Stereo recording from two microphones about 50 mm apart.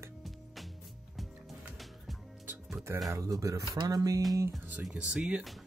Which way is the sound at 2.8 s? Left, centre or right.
Right.